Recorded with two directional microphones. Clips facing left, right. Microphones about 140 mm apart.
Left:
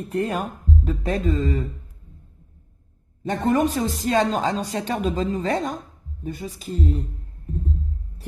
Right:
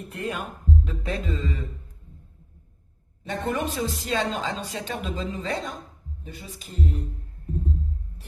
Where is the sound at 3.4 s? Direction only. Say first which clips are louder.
Left 7 dB; 45° left (ahead or behind).